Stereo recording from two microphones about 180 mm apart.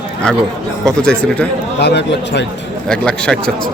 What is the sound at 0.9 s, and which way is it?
Speech, 5° left (ahead or behind).